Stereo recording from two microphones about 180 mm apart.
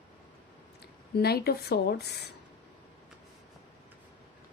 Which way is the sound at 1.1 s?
60° left (ahead or behind).